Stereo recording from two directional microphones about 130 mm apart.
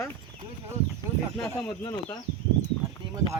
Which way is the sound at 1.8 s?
35° left (ahead or behind).